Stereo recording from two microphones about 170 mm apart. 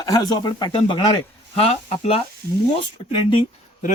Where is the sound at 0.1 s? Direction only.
20° left (ahead or behind).